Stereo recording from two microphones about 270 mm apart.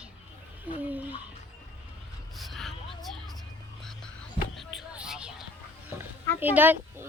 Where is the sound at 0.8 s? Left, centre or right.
Centre.